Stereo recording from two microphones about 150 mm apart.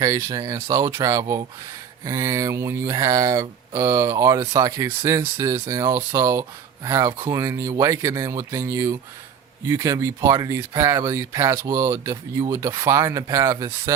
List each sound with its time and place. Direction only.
0.0 s speech: 20° right (ahead or behind)